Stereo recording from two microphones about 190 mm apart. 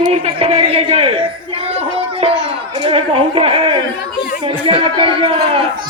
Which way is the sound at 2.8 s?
30° right (ahead or behind).